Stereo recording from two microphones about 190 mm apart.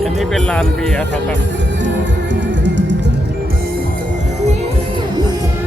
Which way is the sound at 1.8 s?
70° right (ahead or behind).